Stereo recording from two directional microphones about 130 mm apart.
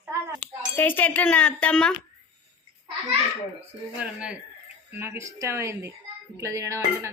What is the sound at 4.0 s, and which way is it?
Speech, 10° right (ahead or behind).